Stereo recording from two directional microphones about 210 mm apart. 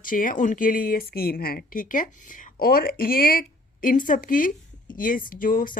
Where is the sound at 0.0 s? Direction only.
40° left (ahead or behind).